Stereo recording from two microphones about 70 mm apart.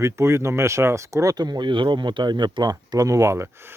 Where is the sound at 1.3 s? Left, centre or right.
Right.